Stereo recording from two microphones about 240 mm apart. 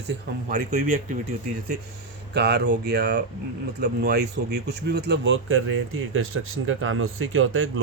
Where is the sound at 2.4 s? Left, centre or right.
Right.